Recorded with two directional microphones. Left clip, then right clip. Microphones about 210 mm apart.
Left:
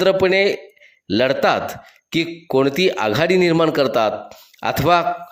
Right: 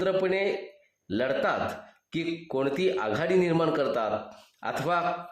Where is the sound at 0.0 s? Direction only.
35° left (ahead or behind).